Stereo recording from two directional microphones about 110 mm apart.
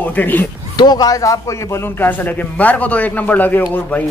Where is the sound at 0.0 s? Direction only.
15° left (ahead or behind).